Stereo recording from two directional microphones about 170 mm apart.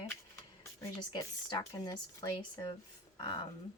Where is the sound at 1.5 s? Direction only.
25° left (ahead or behind).